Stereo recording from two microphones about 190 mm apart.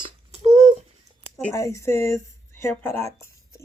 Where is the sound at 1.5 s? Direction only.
15° left (ahead or behind).